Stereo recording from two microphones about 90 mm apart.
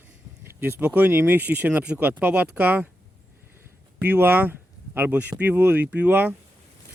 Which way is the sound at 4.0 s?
20° right (ahead or behind).